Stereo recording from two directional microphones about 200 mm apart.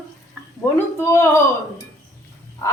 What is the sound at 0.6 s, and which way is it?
Speech, 15° left (ahead or behind).